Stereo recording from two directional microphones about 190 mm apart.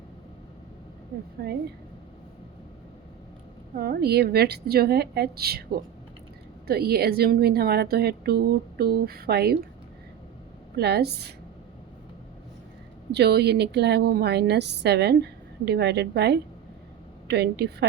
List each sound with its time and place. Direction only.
1.4 s speech: 50° right (ahead or behind)
3.8 s a woman's voice: 55° right (ahead or behind)
10.8 s a woman's voice: 60° right (ahead or behind)
13.1 s a woman's voice: 60° right (ahead or behind)